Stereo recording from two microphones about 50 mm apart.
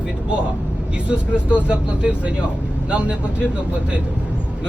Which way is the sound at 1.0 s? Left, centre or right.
Right.